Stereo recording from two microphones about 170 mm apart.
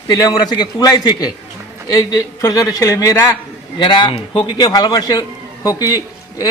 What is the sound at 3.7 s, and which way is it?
A man's voice, 25° left (ahead or behind).